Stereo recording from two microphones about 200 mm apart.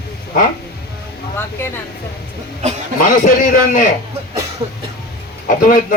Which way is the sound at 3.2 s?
45° left (ahead or behind).